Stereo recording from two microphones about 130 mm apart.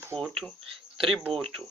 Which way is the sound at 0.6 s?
45° right (ahead or behind).